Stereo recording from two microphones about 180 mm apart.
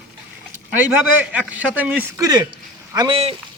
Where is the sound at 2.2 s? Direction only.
20° right (ahead or behind).